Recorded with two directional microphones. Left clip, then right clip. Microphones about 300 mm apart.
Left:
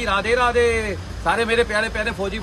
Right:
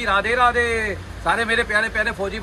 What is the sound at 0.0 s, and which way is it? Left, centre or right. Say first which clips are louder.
Speech: right 1 dB; centre.